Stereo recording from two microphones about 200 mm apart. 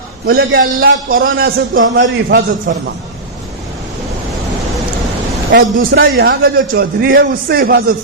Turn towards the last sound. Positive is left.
turn(degrees=-50)  # may be behind; listen again after turning